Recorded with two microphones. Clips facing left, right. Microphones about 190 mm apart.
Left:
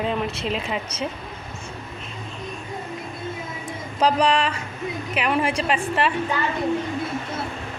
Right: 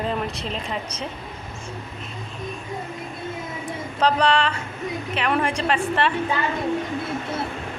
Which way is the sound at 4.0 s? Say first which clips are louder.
Even; 10° left (ahead or behind).